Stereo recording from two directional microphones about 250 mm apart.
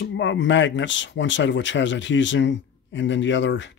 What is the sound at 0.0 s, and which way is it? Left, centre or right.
Speech, left.